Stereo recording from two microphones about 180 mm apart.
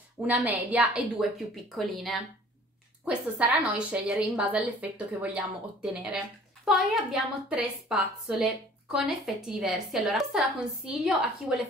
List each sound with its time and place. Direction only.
0.3 s a woman's voice: 10° right (ahead or behind)